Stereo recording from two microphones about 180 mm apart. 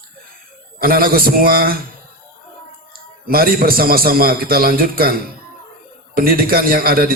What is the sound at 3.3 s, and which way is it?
A man's voice, 55° right (ahead or behind).